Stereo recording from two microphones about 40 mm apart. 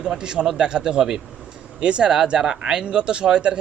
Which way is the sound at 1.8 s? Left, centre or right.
Right.